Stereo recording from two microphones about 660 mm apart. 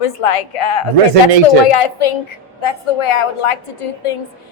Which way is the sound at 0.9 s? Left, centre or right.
Right.